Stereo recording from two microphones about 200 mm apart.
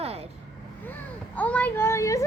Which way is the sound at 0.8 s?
10° left (ahead or behind).